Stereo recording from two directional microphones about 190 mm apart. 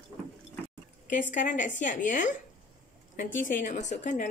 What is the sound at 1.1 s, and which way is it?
A woman's voice, 40° left (ahead or behind).